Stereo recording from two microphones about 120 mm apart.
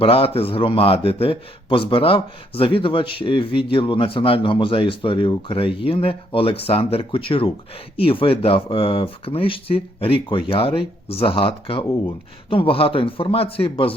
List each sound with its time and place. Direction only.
0.0 s speech: 50° left (ahead or behind)